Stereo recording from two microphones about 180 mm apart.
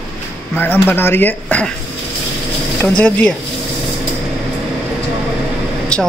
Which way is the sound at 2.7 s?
10° left (ahead or behind).